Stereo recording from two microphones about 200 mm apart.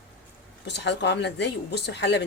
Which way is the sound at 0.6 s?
60° left (ahead or behind).